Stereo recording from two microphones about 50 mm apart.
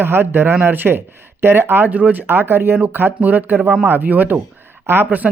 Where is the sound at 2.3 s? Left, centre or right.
Right.